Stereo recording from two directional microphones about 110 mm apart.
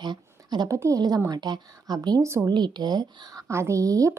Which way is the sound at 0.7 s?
30° right (ahead or behind).